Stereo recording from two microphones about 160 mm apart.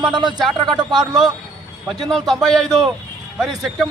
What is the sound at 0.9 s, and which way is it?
A man's voice, centre (ahead or behind).